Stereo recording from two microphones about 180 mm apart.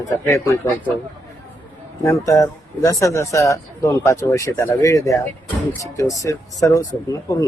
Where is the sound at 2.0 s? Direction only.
15° left (ahead or behind).